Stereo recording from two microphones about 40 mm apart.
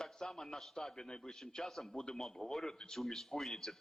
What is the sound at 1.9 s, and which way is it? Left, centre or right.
A man's voice, centre.